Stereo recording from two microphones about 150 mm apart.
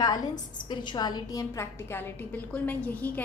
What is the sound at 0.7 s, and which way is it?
A woman's voice, 30° left (ahead or behind).